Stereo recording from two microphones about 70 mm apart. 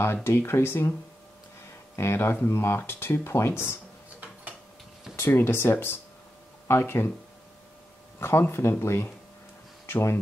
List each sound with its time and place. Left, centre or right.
0.0 s speech: left
2.0 s speech: left
5.3 s speech: left
8.2 s speech: left